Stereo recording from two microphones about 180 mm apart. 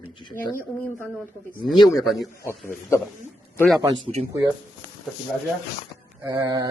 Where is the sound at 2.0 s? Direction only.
Centre (ahead or behind).